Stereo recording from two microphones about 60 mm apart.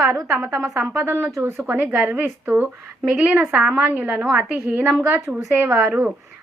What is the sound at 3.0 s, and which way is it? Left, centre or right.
Speech, centre.